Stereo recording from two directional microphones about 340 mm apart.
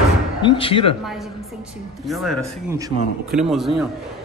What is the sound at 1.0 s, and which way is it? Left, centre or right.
A man's voice, centre.